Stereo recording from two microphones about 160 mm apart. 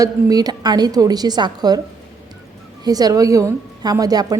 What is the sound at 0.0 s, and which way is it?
A woman's voice, 25° right (ahead or behind).